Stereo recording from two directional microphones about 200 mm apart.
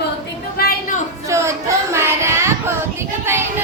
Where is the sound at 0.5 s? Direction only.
50° left (ahead or behind).